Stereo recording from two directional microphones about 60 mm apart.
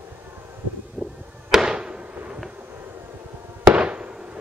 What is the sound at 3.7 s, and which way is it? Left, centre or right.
Fireworks, centre.